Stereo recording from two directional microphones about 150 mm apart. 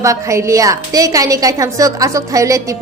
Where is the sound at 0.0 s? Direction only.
20° right (ahead or behind).